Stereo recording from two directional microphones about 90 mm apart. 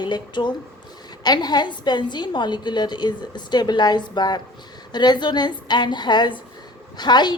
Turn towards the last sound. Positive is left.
turn(degrees=55)  # may be behind; listen again after turning